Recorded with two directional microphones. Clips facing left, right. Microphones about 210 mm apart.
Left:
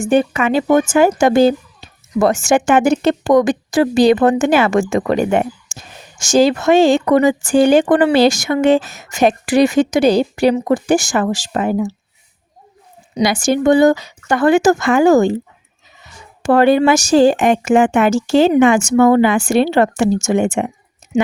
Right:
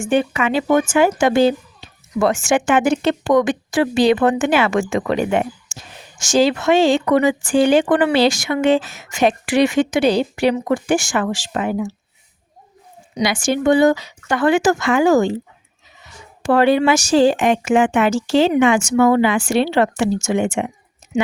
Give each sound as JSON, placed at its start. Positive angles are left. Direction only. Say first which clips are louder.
{"t": 0.0, "sound": "speech", "louder": "left 3 dB", "side_deg": 40}
{"t": 13.1, "sound": "speech", "louder": "left 4 dB", "side_deg": 40}
{"t": 16.4, "sound": "speech", "louder": "left 3 dB", "side_deg": 45}